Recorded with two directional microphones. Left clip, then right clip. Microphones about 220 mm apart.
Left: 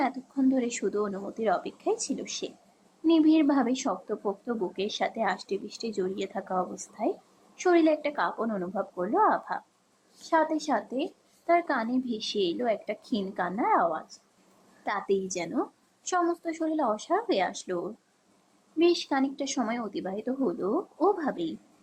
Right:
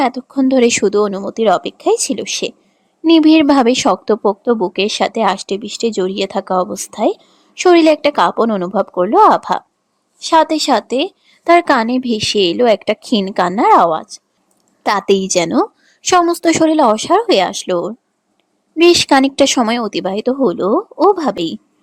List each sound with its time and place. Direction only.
0.0 s a woman's voice: 50° right (ahead or behind)